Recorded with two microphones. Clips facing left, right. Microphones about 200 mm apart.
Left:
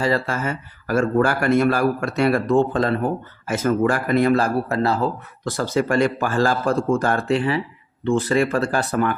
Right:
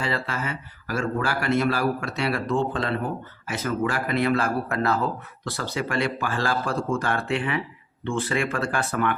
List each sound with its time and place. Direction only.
0.0 s speech: 45° left (ahead or behind)
5.5 s speech: 45° left (ahead or behind)